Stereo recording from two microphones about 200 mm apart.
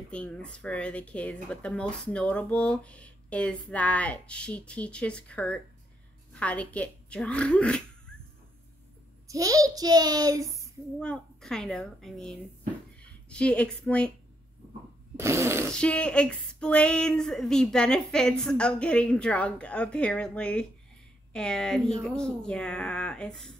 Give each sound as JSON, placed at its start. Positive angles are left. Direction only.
{"t": 0.1, "sound": "speech", "side_deg": 5}
{"t": 9.3, "sound": "a child's voice", "side_deg": -15}
{"t": 11.0, "sound": "a woman's voice", "side_deg": 5}
{"t": 15.1, "sound": "fart", "side_deg": -15}
{"t": 15.7, "sound": "speech", "side_deg": 5}